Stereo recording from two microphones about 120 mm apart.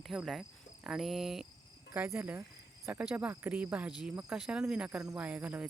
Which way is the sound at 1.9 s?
15° right (ahead or behind).